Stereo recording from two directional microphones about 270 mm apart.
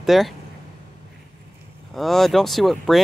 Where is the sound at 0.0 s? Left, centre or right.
Centre.